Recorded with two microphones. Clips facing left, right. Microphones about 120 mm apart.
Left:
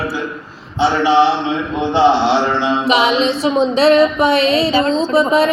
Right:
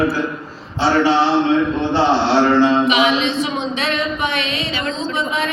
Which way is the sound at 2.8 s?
35° left (ahead or behind).